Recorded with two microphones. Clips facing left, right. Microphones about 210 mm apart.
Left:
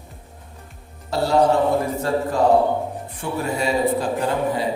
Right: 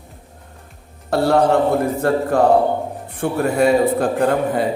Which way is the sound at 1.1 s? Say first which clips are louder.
Right 3 dB; 55° right (ahead or behind).